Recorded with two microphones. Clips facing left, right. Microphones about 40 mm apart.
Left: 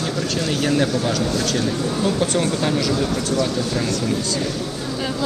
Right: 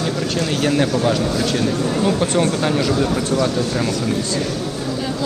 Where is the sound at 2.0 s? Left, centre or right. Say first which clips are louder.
Right 2 dB; centre.